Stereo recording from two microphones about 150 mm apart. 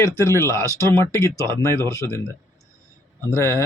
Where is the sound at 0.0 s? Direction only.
20° left (ahead or behind).